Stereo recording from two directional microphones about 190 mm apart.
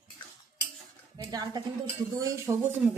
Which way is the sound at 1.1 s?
20° right (ahead or behind).